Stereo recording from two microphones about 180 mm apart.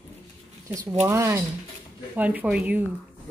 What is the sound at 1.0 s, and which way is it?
Speech, 15° right (ahead or behind).